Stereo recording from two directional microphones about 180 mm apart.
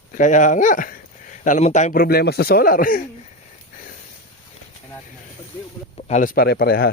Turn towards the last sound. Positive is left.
turn(degrees=55)  # may be behind; listen again after turning